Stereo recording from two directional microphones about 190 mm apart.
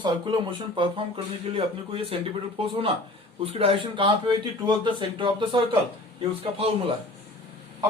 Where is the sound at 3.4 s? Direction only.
30° right (ahead or behind).